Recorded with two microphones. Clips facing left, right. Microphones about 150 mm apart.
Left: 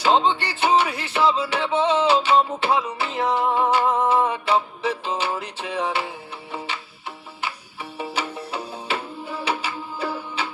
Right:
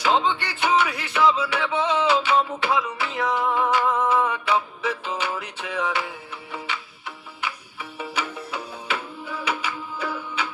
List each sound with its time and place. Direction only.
0.0 s music: 30° left (ahead or behind)